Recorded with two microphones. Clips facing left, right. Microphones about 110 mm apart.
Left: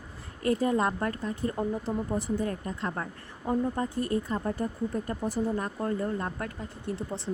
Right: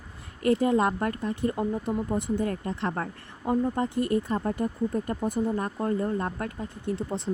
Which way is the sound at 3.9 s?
25° left (ahead or behind).